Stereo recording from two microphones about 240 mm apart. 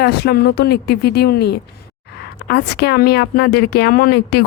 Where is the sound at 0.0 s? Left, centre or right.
Left.